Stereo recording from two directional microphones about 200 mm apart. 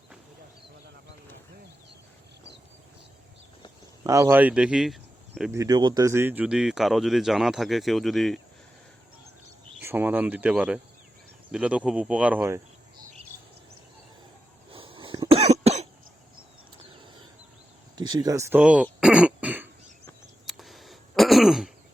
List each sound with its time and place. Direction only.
4.0 s speech: 15° right (ahead or behind)
5.5 s speech: 15° right (ahead or behind); by 8.4 s centre (ahead or behind)
9.7 s speech: 10° right (ahead or behind)
14.7 s cough: 25° right (ahead or behind)
17.9 s throat clearing: 20° right (ahead or behind); by 21.7 s centre (ahead or behind)